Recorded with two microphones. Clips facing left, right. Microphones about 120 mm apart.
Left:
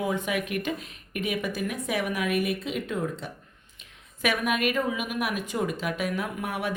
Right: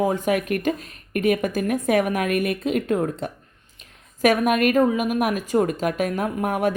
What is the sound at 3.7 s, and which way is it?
Speech, 45° right (ahead or behind).